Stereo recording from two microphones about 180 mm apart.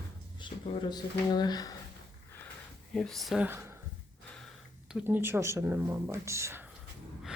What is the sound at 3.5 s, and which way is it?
Speech, 10° right (ahead or behind).